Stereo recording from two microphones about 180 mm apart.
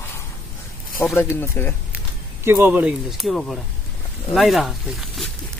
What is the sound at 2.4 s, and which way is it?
Speech, 10° right (ahead or behind).